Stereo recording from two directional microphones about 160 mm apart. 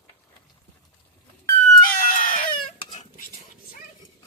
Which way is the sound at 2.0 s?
60° left (ahead or behind).